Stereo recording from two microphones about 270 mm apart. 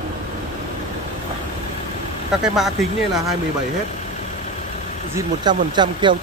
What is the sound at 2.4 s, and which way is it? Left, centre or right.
Speech, centre.